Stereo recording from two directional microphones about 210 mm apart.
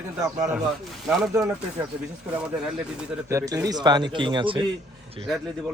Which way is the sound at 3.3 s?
15° right (ahead or behind).